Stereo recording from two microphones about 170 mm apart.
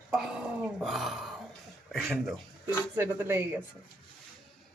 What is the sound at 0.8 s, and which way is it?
Speech, centre (ahead or behind).